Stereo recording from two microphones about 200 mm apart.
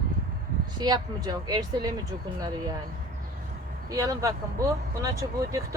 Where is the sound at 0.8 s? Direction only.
20° right (ahead or behind).